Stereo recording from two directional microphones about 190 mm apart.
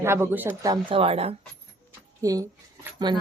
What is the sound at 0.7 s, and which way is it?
Speech, 30° right (ahead or behind).